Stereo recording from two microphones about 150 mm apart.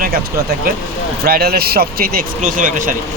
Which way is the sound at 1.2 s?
90° right.